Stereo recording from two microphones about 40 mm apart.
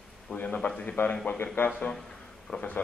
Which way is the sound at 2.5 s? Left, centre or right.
Left.